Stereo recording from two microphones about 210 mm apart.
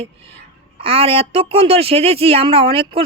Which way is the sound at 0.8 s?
25° right (ahead or behind).